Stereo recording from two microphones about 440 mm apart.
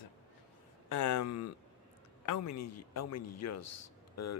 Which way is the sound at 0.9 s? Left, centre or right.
Left.